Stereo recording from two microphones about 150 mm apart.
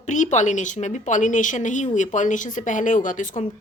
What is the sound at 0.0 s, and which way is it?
Speech, 55° left (ahead or behind).